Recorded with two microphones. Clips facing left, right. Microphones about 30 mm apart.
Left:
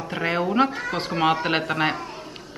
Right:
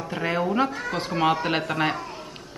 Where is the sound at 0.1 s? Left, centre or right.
Centre.